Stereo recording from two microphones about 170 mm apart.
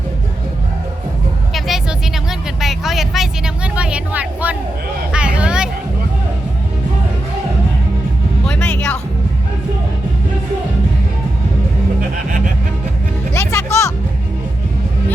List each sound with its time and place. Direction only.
1.5 s music: centre (ahead or behind)
2.6 s vehicle: centre (ahead or behind)
5.1 s a sound: 5° right (ahead or behind)
8.4 s music: 5° left (ahead or behind)
13.3 s music: 15° left (ahead or behind)